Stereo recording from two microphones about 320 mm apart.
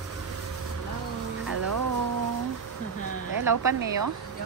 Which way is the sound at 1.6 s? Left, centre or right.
Right.